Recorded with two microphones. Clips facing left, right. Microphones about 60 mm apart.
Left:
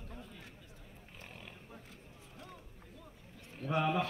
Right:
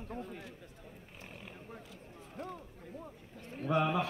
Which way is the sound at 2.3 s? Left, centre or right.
Right.